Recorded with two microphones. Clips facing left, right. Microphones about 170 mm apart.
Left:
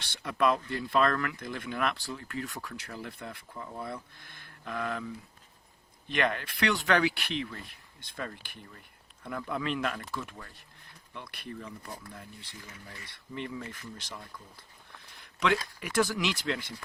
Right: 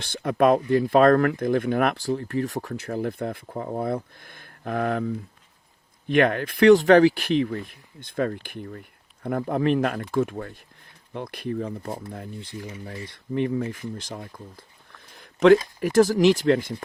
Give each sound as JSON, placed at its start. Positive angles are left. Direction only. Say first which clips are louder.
{"t": 0.0, "sound": "speech", "louder": "right 8 dB", "side_deg": -55}
{"t": 15.1, "sound": "a sound", "louder": "right 14 dB", "side_deg": -45}
{"t": 15.8, "sound": "speech", "louder": "right 11 dB", "side_deg": -40}